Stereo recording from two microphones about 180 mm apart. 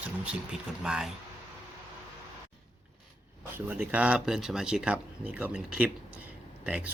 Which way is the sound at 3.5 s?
10° right (ahead or behind).